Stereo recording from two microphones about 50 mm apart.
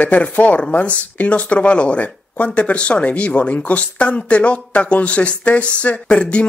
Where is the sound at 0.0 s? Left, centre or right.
Left.